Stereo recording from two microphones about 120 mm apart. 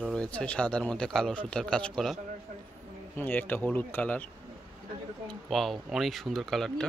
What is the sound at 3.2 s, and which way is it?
Speech, 15° left (ahead or behind).